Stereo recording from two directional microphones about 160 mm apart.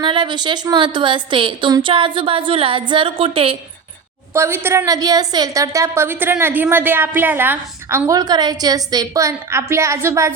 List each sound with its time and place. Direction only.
0.0 s a woman's voice: 30° right (ahead or behind)
4.4 s a woman's voice: 15° right (ahead or behind)